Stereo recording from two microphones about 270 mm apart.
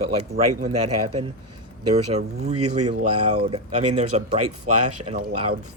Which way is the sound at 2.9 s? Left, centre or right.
Right.